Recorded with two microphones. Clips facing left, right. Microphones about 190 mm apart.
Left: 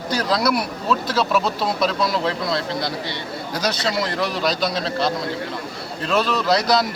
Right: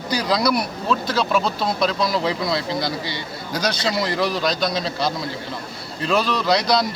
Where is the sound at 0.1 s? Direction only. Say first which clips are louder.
Even; centre (ahead or behind).